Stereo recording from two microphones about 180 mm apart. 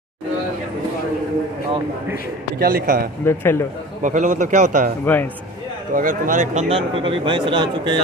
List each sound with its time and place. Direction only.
2.6 s speech: 55° right (ahead or behind)
3.3 s a man's voice: 15° left (ahead or behind)
4.0 s a man's voice: 45° right (ahead or behind)
5.0 s a man's voice: 10° left (ahead or behind)
5.9 s a man's voice: 50° right (ahead or behind)
6.7 s speech: 30° right (ahead or behind)